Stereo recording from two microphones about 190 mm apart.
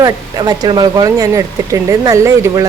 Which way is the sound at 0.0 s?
20° right (ahead or behind).